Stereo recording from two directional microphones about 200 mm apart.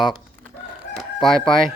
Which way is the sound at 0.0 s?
Centre (ahead or behind).